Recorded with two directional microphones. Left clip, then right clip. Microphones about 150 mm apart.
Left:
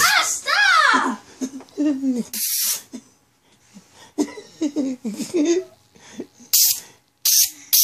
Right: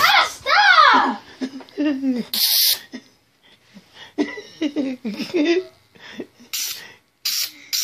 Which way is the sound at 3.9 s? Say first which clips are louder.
Right 1 dB; 15° left (ahead or behind).